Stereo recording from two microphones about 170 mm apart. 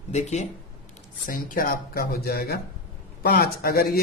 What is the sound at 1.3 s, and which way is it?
A man's voice, 55° left (ahead or behind).